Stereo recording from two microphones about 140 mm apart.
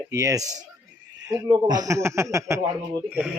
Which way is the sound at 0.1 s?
25° right (ahead or behind).